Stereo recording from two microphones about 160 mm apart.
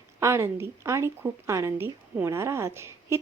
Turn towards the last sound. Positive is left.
turn(degrees=-15)  # may be behind; listen again after turning